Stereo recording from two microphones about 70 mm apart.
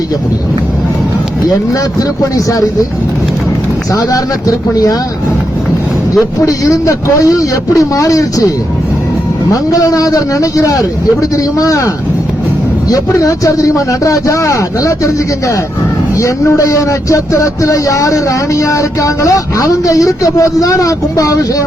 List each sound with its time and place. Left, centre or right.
3.9 s a man's voice: left
6.1 s a man's voice: left
12.9 s speech: left